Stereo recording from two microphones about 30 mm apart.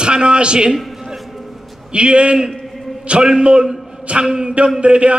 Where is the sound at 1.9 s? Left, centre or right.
Right.